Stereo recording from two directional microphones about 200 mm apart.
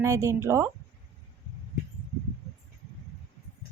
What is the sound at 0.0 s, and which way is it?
Speech, 15° right (ahead or behind).